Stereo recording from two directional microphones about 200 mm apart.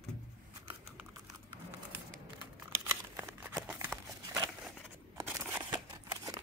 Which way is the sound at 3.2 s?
10° right (ahead or behind).